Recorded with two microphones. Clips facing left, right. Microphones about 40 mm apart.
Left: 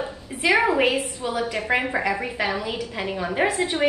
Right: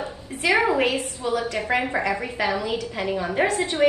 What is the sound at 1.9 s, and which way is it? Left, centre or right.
A woman's voice, centre.